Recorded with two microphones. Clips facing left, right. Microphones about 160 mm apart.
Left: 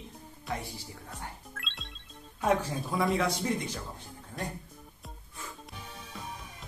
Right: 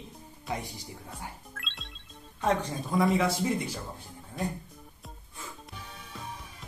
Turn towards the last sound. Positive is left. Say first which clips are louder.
# even
turn(degrees=0)  # may be behind; listen again after turning